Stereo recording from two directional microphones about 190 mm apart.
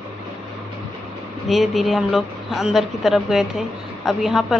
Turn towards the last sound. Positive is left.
turn(degrees=0)  # may be behind; listen again after turning